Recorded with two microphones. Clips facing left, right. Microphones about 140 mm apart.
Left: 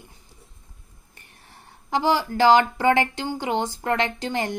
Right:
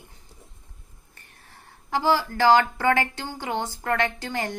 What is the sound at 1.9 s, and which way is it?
A woman's voice, 20° left (ahead or behind).